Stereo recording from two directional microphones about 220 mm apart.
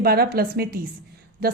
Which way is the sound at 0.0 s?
45° right (ahead or behind).